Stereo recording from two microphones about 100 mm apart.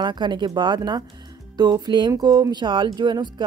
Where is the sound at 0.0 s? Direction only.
50° right (ahead or behind).